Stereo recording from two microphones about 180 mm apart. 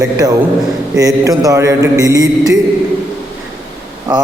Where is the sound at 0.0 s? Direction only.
20° right (ahead or behind).